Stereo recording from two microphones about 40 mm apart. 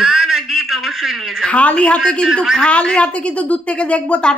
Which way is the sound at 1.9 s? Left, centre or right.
Centre.